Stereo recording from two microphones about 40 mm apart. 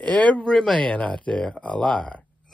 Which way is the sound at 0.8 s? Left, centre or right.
Left.